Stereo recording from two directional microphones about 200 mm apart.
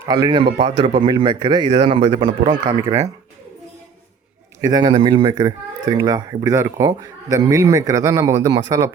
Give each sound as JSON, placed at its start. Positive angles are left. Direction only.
{"t": 0.0, "sound": "speech", "side_deg": -20}
{"t": 4.6, "sound": "speech", "side_deg": -20}